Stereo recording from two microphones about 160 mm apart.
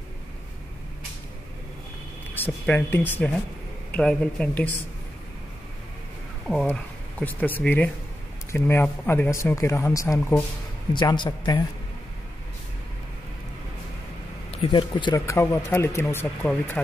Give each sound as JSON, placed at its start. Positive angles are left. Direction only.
{"t": 2.3, "sound": "speech", "side_deg": 10}
{"t": 6.4, "sound": "speech", "side_deg": 5}
{"t": 10.9, "sound": "speech", "side_deg": 30}
{"t": 14.5, "sound": "speech", "side_deg": 35}
{"t": 15.1, "sound": "speech", "side_deg": 15}